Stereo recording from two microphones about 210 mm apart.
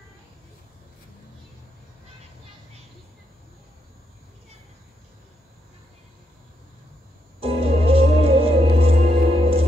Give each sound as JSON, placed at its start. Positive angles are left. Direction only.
{"t": 7.3, "sound": "music", "side_deg": -25}